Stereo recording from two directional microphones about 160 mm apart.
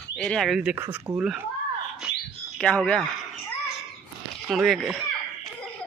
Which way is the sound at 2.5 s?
5° left (ahead or behind).